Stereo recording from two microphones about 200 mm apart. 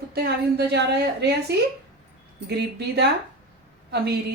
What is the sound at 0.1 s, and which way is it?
A woman's voice, 55° right (ahead or behind).